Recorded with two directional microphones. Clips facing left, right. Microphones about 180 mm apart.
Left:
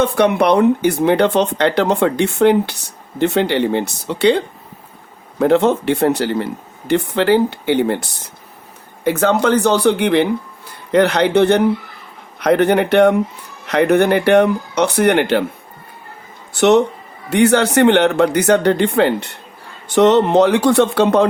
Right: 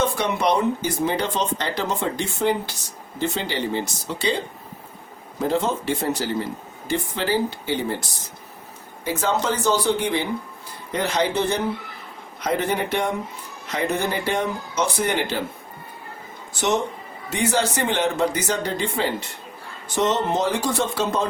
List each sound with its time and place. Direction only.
0.0 s speech: 65° left (ahead or behind)
5.4 s speech: 65° left (ahead or behind)
16.5 s speech: 65° left (ahead or behind)